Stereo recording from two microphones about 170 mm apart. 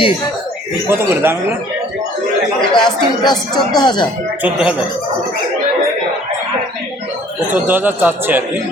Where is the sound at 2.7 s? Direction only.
25° left (ahead or behind).